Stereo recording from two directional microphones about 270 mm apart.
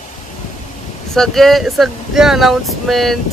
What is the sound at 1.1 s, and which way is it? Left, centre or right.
Speech, centre.